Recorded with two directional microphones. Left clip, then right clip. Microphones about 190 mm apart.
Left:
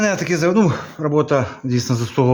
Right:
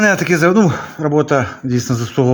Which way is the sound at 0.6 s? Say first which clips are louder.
Right 3 dB; 5° right (ahead or behind).